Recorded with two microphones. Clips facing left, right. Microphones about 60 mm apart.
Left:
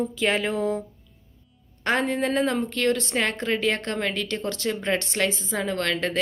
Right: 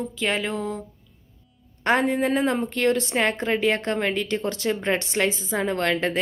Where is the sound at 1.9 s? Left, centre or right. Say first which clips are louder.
Right 3 dB; centre.